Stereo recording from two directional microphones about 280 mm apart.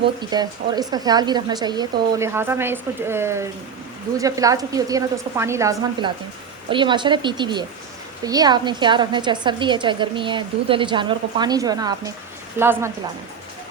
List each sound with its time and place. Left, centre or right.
0.2 s a woman's voice: centre